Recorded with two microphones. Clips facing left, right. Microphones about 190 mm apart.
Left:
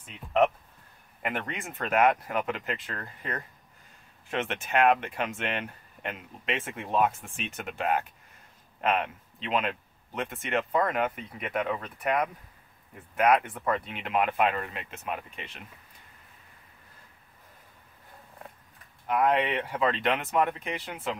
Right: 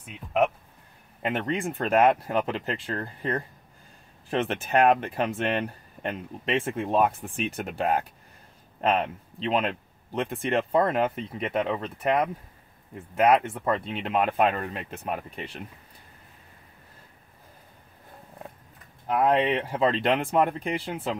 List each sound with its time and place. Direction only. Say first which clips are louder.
1.2 s speech: right 6 dB; 25° right (ahead or behind)
19.0 s speech: right 3 dB; 30° right (ahead or behind)